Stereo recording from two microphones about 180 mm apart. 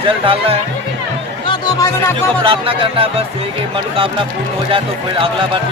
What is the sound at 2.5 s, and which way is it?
Speech, 30° right (ahead or behind).